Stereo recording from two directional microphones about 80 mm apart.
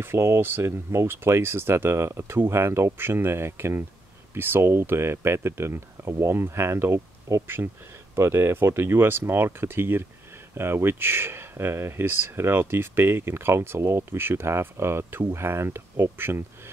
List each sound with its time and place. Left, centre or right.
0.0 s speech: right